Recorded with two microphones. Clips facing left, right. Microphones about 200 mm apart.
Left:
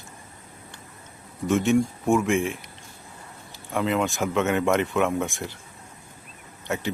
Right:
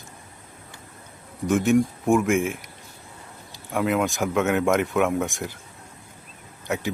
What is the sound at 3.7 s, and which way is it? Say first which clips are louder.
Speech: right 1 dB; centre (ahead or behind).